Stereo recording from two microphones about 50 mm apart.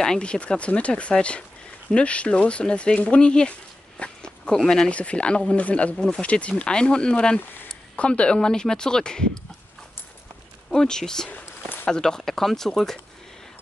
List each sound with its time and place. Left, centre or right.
0.0 s speech: centre
4.0 s a sound: centre
4.6 s speech: centre
10.7 s speech: centre
11.2 s a sound: left
11.9 s speech: centre